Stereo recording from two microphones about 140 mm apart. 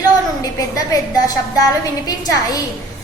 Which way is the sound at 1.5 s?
25° left (ahead or behind).